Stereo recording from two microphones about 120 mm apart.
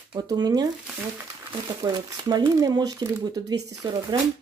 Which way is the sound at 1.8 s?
35° right (ahead or behind).